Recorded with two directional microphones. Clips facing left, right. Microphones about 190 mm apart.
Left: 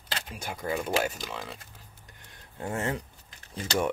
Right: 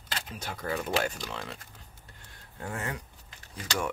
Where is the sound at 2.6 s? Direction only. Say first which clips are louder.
Left 5 dB; 25° left (ahead or behind).